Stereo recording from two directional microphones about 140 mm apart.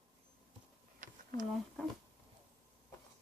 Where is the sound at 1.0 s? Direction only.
70° right (ahead or behind).